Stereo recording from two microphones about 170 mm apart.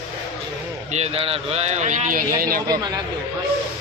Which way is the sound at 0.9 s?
40° right (ahead or behind).